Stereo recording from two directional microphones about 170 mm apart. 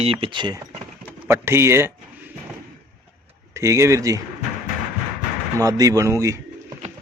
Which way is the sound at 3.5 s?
15° right (ahead or behind).